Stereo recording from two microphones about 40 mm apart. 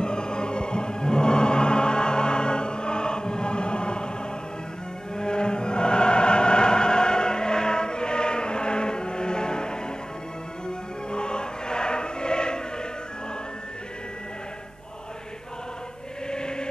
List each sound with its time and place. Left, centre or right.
0.0 s music: left
5.1 s music: left
11.1 s choir: left
16.3 s chant: left